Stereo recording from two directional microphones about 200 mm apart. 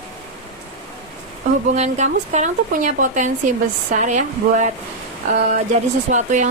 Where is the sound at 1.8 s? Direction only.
35° right (ahead or behind).